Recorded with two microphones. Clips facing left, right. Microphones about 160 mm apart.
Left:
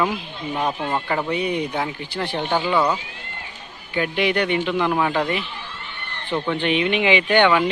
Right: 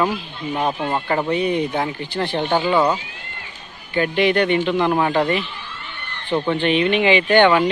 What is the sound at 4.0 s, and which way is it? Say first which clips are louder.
Speech: right 4 dB; 10° left (ahead or behind).